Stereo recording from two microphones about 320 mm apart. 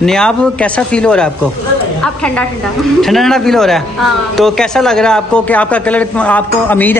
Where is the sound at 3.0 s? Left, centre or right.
Centre.